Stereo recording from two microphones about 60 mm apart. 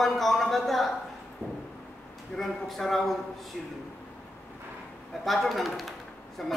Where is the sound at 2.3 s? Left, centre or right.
Centre.